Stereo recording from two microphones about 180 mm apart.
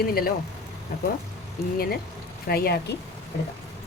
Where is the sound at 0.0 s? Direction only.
55° left (ahead or behind).